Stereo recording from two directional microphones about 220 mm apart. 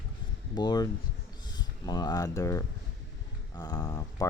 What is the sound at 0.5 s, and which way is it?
Speech, 20° left (ahead or behind).